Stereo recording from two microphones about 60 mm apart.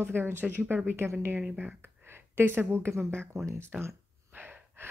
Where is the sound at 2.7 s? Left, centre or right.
Right.